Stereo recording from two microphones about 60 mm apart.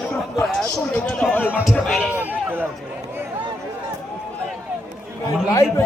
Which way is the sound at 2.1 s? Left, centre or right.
Right.